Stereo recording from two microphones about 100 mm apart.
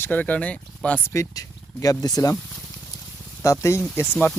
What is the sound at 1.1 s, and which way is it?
Speech, 30° left (ahead or behind).